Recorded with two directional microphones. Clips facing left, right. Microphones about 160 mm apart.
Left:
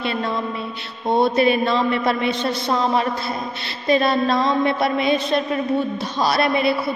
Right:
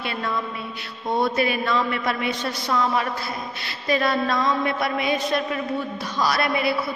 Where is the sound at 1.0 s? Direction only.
25° left (ahead or behind).